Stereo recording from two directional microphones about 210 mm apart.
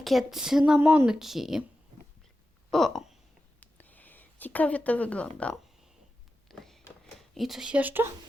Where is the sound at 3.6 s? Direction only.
10° left (ahead or behind).